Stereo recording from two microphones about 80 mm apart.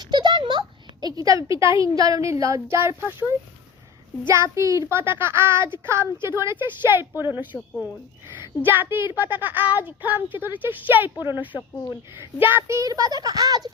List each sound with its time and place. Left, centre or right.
0.0 s a sound: right
1.0 s a woman's voice: right
4.3 s a woman's voice: right
7.5 s speech: centre
8.6 s a woman's voice: right
12.9 s speech: right